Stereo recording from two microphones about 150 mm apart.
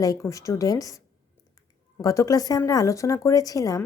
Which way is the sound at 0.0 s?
20° left (ahead or behind).